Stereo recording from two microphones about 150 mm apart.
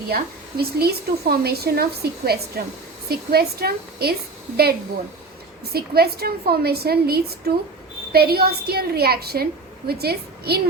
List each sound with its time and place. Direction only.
0.1 s a woman's voice: 90° right
5.7 s a woman's voice: 90° right